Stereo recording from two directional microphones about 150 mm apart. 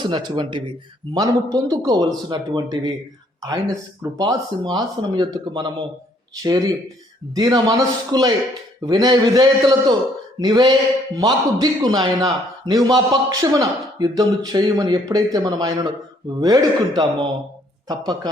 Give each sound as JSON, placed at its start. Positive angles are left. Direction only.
{"t": 0.0, "sound": "a man's voice", "side_deg": -30}
{"t": 4.2, "sound": "a man's voice", "side_deg": -30}